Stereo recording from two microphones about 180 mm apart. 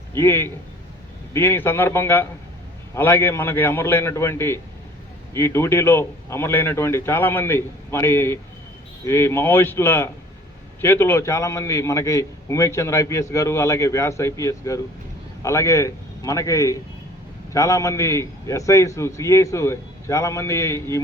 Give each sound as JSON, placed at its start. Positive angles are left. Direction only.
{"t": 0.1, "sound": "a man's voice", "side_deg": 15}